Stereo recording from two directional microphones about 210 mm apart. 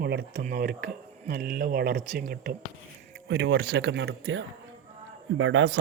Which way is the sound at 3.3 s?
60° right (ahead or behind).